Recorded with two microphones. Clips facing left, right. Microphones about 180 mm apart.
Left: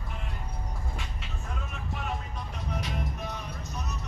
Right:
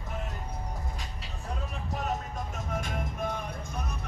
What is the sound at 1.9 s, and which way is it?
Music, 40° right (ahead or behind).